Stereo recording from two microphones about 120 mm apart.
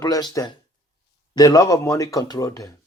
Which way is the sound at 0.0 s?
35° left (ahead or behind).